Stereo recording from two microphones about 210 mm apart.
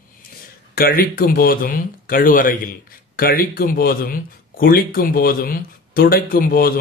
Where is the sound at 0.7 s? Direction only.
45° left (ahead or behind).